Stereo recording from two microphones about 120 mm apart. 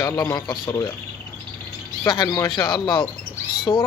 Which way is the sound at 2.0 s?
30° left (ahead or behind).